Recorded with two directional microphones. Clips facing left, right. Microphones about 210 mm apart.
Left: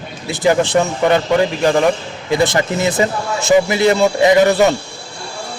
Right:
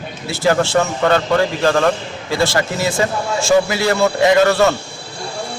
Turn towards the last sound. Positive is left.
turn(degrees=15)  # may be behind; listen again after turning